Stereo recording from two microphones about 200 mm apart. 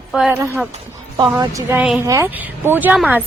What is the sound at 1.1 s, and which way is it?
A woman's voice, 15° right (ahead or behind).